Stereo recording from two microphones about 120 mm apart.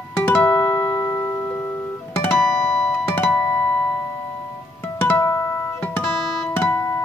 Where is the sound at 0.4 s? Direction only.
20° left (ahead or behind).